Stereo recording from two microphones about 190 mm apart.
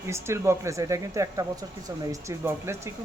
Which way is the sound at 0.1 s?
15° right (ahead or behind).